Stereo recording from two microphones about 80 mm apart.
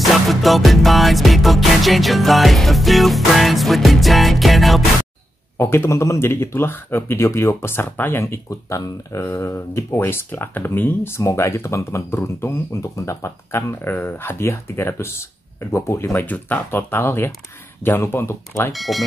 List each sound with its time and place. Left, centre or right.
0.0 s music: centre
5.6 s speech: left
9.2 s speech: left
18.7 s music: centre